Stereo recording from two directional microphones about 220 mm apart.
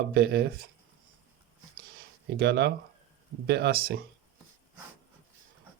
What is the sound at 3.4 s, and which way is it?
Speech, 50° right (ahead or behind).